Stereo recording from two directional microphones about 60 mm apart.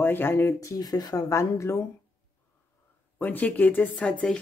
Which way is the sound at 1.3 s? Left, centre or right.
Left.